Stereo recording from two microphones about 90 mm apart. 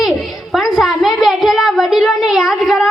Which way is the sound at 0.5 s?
Centre (ahead or behind).